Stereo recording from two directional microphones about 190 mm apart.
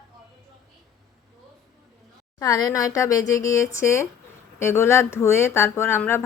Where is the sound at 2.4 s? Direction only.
20° left (ahead or behind).